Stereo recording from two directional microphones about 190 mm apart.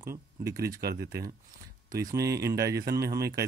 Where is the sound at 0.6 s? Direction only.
55° right (ahead or behind).